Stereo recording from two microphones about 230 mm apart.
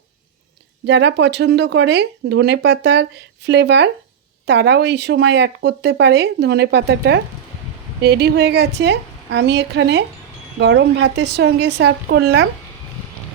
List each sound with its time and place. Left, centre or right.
0.9 s speech: right